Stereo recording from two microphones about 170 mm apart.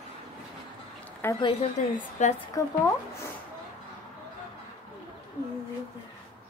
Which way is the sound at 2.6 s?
20° left (ahead or behind).